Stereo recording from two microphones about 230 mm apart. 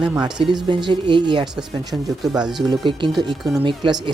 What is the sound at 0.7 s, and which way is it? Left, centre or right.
Speech, centre.